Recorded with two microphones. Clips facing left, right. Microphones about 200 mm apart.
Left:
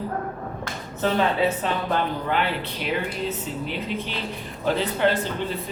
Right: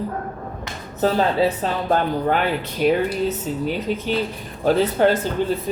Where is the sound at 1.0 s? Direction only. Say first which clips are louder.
Right 3 dB; 35° right (ahead or behind).